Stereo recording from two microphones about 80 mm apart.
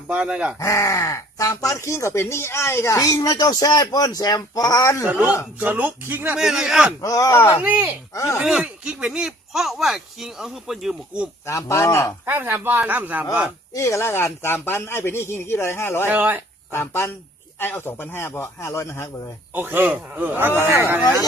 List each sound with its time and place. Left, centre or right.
0.1 s a man's voice: centre
0.6 s speech: left
5.5 s speech: right
6.3 s a man's voice: centre
7.0 s speech: left
7.6 s speech: right
8.1 s speech: left
8.4 s a man's voice: centre
11.4 s speech: left
12.2 s speech: right
13.7 s speech: left
16.0 s speech: right
16.7 s a man's voice: left
19.5 s speech: right